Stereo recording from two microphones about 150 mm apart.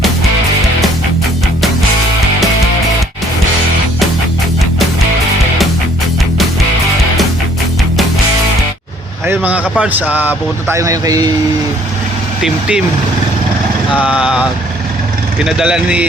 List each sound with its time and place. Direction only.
9.2 s vehicle: 10° right (ahead or behind)
9.8 s speech: 10° right (ahead or behind)
12.4 s speech: 5° right (ahead or behind)
13.9 s speech: 5° right (ahead or behind)
15.4 s speech: 5° right (ahead or behind)